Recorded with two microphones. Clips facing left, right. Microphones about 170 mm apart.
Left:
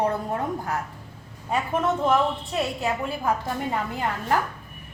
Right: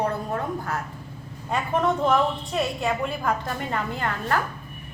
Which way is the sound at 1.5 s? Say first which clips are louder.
Right 1 dB; 5° left (ahead or behind).